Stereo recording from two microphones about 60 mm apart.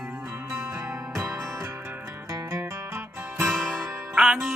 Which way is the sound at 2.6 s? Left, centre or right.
Right.